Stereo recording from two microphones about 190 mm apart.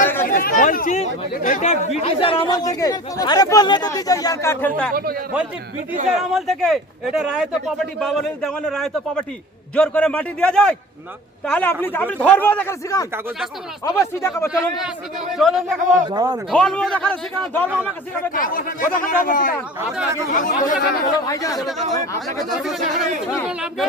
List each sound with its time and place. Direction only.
0.3 s speech: 45° left (ahead or behind); by 4.9 s 10° left (ahead or behind)
6.3 s a man's voice: centre (ahead or behind)
15.4 s speech: centre (ahead or behind)
16.0 s a man's voice: 20° right (ahead or behind)
16.5 s speech: 5° left (ahead or behind)
18.3 s speech: 45° left (ahead or behind)
21.1 s a man's voice: 20° left (ahead or behind)
21.6 s speech: centre (ahead or behind)
21.9 s a man's voice: 15° left (ahead or behind)
22.4 s speech: centre (ahead or behind)